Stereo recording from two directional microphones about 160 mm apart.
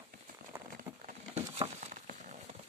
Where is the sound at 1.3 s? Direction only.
40° right (ahead or behind).